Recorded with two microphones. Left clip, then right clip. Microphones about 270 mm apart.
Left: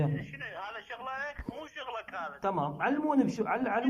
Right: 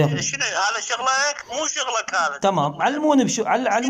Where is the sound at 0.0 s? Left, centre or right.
Right.